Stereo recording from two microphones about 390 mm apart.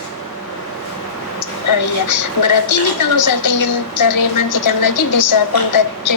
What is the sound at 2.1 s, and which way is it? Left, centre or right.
A woman's voice, left.